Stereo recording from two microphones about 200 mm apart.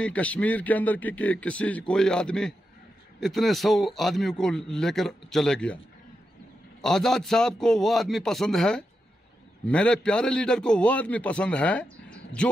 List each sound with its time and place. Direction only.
0.0 s a man's voice: 5° left (ahead or behind)
6.8 s a man's voice: centre (ahead or behind)